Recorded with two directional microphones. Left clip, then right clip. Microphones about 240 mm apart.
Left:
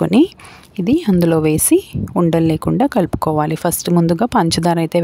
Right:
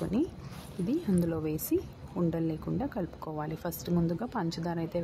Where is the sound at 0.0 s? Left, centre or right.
Left.